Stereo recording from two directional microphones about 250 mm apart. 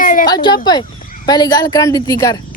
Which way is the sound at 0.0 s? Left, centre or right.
Left.